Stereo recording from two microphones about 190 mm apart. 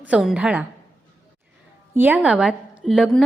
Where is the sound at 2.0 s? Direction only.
10° right (ahead or behind).